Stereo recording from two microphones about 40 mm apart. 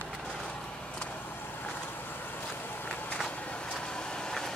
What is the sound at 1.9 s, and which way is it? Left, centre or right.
Boat, left.